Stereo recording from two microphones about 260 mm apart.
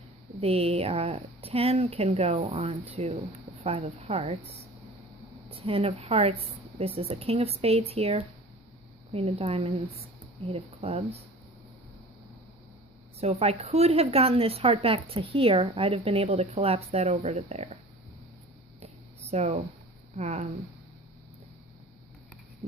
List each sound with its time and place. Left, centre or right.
0.4 s a woman's voice: right
5.5 s a woman's voice: right
13.1 s a woman's voice: right
19.3 s a woman's voice: right